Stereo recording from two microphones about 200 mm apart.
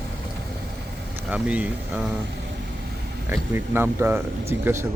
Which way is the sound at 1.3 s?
5° right (ahead or behind).